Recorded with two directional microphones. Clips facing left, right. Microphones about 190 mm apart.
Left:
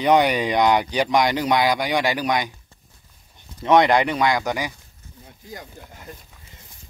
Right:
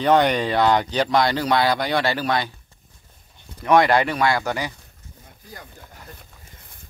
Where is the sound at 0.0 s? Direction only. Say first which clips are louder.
Even; 10° left (ahead or behind).